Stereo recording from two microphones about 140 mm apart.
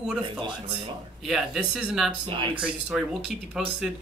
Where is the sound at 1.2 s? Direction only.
5° right (ahead or behind).